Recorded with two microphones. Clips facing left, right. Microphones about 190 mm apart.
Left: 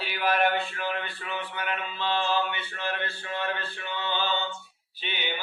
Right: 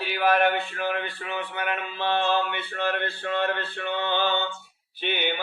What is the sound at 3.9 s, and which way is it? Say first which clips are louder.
Mantra: right 5 dB; 60° right (ahead or behind).